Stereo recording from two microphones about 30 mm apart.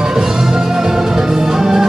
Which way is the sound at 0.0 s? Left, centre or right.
Centre.